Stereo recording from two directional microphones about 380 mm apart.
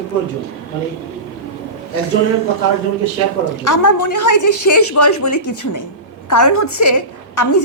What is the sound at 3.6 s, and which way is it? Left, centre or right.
A woman's voice, left.